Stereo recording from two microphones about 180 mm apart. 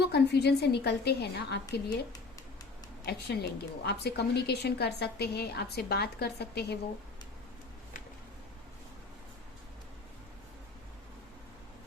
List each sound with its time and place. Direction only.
0.0 s a woman's voice: 65° left (ahead or behind)
3.1 s a woman's voice: 65° left (ahead or behind)